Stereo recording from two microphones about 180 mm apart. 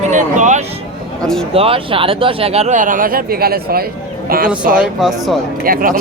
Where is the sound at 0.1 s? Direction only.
40° right (ahead or behind).